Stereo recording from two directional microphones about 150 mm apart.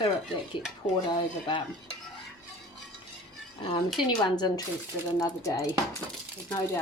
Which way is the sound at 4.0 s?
30° left (ahead or behind).